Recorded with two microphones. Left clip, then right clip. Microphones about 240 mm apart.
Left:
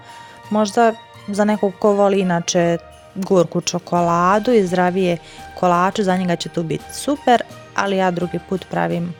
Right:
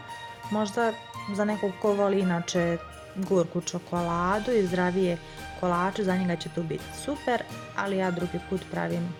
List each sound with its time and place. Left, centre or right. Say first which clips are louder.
0.5 s speech: left 12 dB; left